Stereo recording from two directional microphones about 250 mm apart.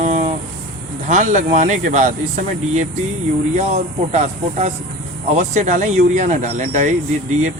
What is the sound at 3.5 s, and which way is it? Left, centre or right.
Speech, right.